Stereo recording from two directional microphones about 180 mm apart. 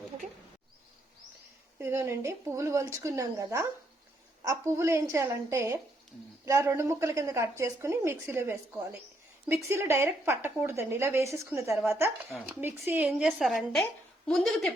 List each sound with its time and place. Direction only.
1.8 s a woman's voice: 15° right (ahead or behind); by 14.7 s centre (ahead or behind)